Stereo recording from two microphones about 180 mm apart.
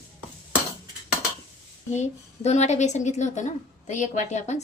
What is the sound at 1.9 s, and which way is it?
A woman's voice, 40° left (ahead or behind).